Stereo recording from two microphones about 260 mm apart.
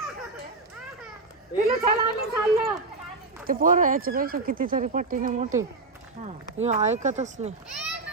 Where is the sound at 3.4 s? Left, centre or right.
Right.